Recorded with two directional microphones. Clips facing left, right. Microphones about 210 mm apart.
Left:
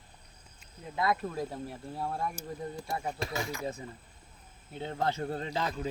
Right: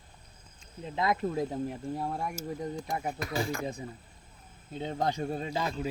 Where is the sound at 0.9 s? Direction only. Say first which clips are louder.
Right 2 dB; 20° right (ahead or behind).